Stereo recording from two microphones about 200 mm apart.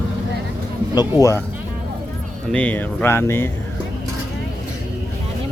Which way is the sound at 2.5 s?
5° left (ahead or behind).